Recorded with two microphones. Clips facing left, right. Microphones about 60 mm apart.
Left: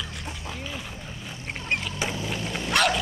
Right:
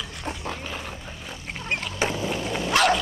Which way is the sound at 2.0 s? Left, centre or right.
Right.